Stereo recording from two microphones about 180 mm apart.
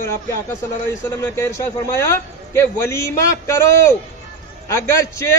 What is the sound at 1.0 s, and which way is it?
A man's voice, 15° left (ahead or behind).